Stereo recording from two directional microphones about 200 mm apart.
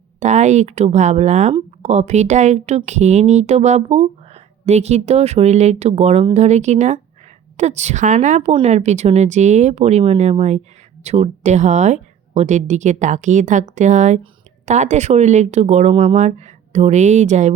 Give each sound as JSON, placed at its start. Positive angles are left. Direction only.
{"t": 0.2, "sound": "speech", "side_deg": -35}